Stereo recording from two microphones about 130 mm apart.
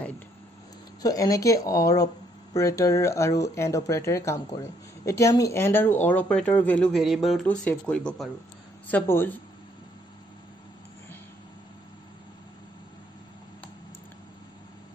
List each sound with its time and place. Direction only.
1.0 s a woman's voice: 25° left (ahead or behind); by 7.4 s centre (ahead or behind)
7.4 s speech: 10° left (ahead or behind)